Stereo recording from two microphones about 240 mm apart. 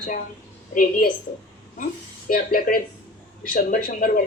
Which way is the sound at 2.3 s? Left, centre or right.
Left.